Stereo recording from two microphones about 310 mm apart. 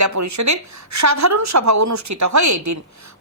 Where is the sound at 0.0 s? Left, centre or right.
Right.